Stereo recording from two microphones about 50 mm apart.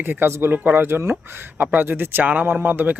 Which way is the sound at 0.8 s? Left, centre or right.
Right.